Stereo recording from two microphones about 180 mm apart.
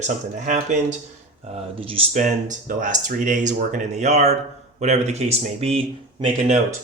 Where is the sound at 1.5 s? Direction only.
30° right (ahead or behind).